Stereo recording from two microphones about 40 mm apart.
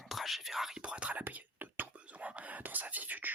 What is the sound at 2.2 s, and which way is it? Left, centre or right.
Whispering, right.